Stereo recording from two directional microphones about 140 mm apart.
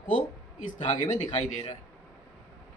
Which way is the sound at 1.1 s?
50° left (ahead or behind).